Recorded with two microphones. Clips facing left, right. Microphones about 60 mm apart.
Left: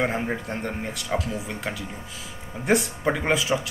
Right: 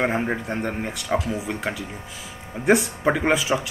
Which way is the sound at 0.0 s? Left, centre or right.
Centre.